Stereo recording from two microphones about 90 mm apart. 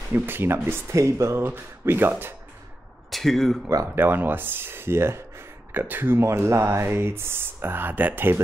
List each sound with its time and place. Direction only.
0.1 s speech: 25° right (ahead or behind)
3.1 s speech: 5° left (ahead or behind)
3.9 s speech: 25° right (ahead or behind)